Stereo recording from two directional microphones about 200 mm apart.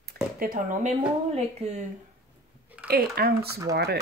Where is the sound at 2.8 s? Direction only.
50° right (ahead or behind).